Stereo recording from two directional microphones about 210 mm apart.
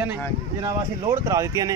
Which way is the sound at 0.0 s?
10° right (ahead or behind).